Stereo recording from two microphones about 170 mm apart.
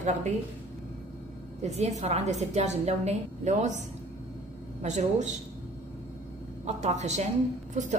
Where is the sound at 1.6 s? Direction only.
40° right (ahead or behind).